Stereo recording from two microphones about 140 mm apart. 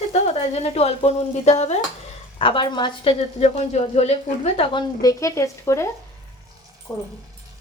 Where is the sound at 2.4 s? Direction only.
35° left (ahead or behind).